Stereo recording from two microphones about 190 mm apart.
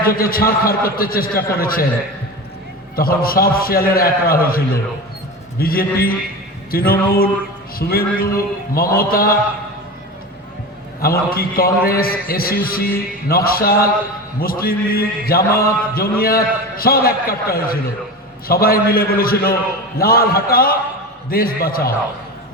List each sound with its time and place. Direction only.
0.0 s a man's voice: 50° left (ahead or behind)
2.9 s a man's voice: 50° left (ahead or behind)
11.0 s a man's voice: 50° left (ahead or behind)